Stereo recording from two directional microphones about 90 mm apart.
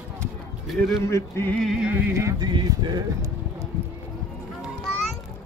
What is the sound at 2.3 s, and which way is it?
Speech, 50° right (ahead or behind).